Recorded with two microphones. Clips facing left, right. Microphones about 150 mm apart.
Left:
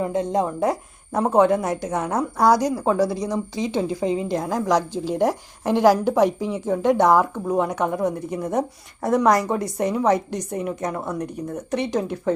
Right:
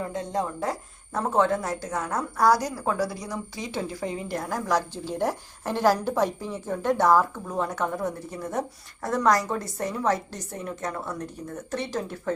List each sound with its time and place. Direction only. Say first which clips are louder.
0.0 s a woman's voice: left 7 dB; 20° left (ahead or behind)